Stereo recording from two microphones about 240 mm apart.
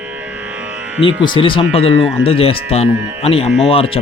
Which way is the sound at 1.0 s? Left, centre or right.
Centre.